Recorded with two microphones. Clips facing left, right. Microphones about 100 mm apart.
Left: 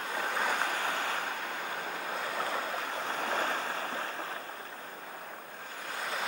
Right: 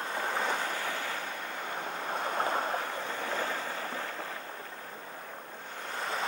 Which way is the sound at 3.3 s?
20° left (ahead or behind).